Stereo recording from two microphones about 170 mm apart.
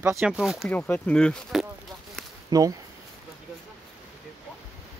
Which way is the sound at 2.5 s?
20° right (ahead or behind).